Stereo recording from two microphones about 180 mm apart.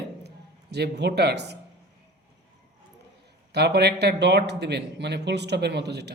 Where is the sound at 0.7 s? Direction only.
70° right (ahead or behind).